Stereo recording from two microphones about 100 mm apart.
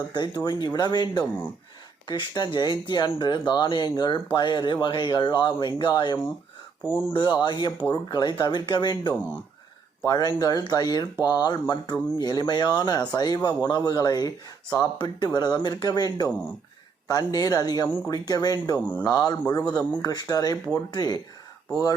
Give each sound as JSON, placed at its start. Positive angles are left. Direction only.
{"t": 0.1, "sound": "speech", "side_deg": 45}
{"t": 1.2, "sound": "speech", "side_deg": 15}
{"t": 2.0, "sound": "speech", "side_deg": 45}
{"t": 10.0, "sound": "speech", "side_deg": 40}